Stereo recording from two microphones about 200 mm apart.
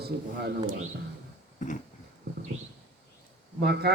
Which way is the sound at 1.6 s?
40° left (ahead or behind).